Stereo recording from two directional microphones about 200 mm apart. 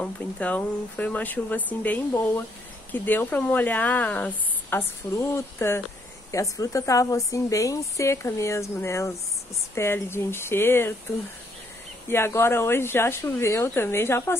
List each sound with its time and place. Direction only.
0.0 s speech: 5° left (ahead or behind)
12.1 s speech: 10° left (ahead or behind)